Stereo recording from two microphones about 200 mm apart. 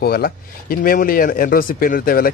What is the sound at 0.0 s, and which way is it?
A man's voice, 50° left (ahead or behind).